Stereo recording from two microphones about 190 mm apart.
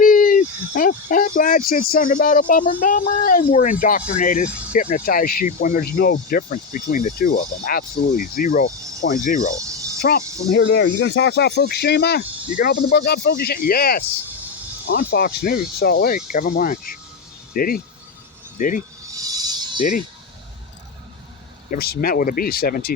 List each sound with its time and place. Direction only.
0.0 s speech: 45° left (ahead or behind)
9.6 s cricket: 15° right (ahead or behind)
10.0 s speech: 55° left (ahead or behind)
14.8 s speech: 65° left (ahead or behind); by 18.8 s 45° left (ahead or behind)
19.1 s a sound: 20° right (ahead or behind)
21.7 s speech: 50° left (ahead or behind)